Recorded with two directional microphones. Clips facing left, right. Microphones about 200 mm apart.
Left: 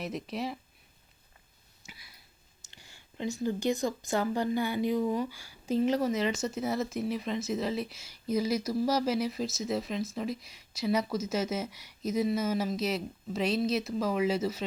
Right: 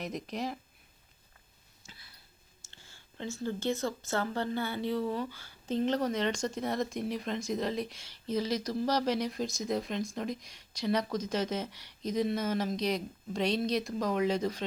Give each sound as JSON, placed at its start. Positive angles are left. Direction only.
{"t": 0.0, "sound": "speech", "side_deg": 5}
{"t": 1.8, "sound": "a sound", "side_deg": 65}
{"t": 2.6, "sound": "speech", "side_deg": 15}